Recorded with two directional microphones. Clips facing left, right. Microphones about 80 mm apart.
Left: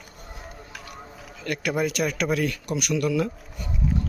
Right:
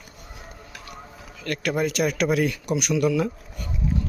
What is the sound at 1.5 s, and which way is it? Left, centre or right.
Speech, centre.